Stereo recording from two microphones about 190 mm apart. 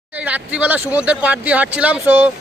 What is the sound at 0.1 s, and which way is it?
Speech, 10° right (ahead or behind).